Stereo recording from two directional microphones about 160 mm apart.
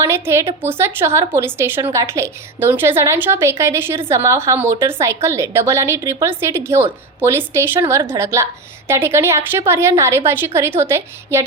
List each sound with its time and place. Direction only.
0.0 s a woman's voice: 15° right (ahead or behind)